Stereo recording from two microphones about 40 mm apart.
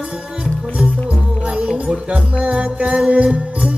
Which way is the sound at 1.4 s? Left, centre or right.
Right.